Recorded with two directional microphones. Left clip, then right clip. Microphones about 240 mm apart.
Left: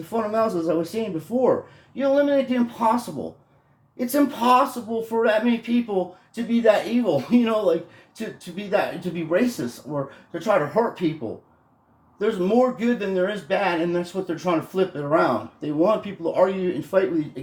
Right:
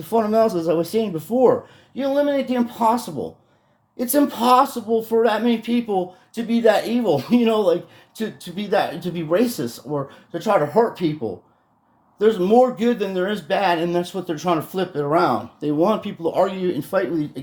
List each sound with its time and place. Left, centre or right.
0.1 s speech: right
10.8 s speech: right
12.2 s speech: right